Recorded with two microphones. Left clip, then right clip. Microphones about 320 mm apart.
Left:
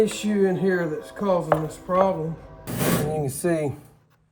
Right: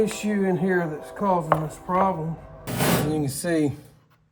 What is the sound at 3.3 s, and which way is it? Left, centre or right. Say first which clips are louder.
Speech: even; centre.